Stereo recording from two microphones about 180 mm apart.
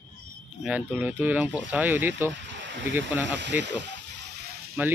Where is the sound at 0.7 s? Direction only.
10° right (ahead or behind).